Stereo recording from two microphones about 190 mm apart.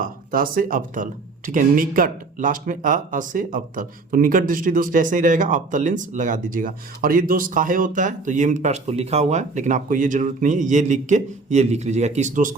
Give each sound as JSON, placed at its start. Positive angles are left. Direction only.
{"t": 0.0, "sound": "speech", "side_deg": -50}